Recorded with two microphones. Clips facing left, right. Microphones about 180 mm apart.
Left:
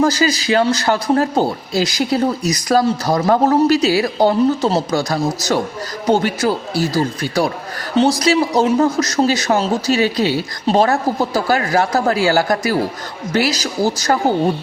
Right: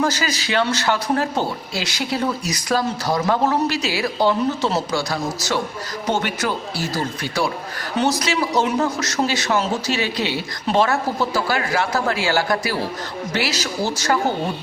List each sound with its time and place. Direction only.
0.0 s speech: 35° left (ahead or behind)